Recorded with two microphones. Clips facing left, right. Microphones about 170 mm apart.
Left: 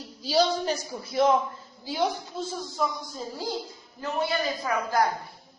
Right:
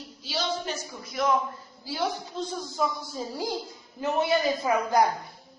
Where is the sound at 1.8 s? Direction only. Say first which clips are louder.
Left 3 dB; 20° left (ahead or behind).